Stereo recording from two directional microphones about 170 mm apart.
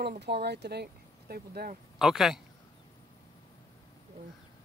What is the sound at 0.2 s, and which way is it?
Speech, 75° right (ahead or behind).